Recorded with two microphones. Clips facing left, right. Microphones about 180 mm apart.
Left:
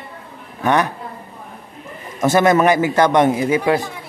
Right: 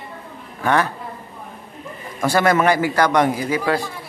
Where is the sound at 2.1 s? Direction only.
20° left (ahead or behind).